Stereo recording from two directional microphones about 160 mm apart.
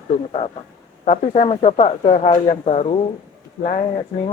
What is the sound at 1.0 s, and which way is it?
Speech, 45° left (ahead or behind).